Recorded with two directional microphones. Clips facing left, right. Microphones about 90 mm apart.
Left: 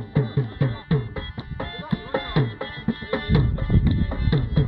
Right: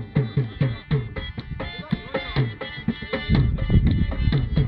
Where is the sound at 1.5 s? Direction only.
30° left (ahead or behind).